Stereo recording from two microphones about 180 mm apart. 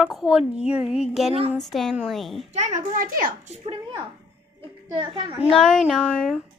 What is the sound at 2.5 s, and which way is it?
A child's voice, 40° right (ahead or behind).